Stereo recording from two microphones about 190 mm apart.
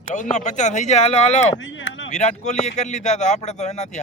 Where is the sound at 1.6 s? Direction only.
90° left.